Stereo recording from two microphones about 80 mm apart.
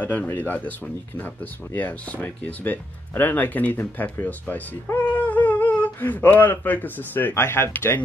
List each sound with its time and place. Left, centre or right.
0.0 s speech: centre